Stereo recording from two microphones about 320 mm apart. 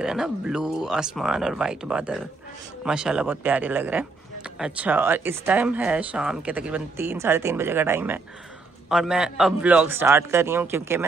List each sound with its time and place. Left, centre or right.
0.0 s a man's voice: centre